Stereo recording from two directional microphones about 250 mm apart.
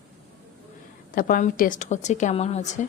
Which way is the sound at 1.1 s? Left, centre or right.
Left.